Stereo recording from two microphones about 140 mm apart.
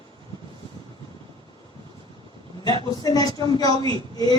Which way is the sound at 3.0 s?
25° left (ahead or behind).